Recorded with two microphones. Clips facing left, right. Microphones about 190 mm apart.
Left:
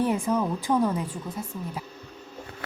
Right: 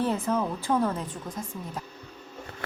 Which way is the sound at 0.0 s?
15° left (ahead or behind).